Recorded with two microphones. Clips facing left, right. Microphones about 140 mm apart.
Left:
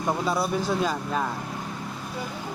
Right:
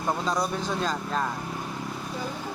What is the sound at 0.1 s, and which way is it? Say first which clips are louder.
A man's voice: left 2 dB; 5° left (ahead or behind).